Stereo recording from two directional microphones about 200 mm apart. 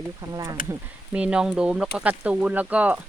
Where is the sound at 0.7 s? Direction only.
5° right (ahead or behind).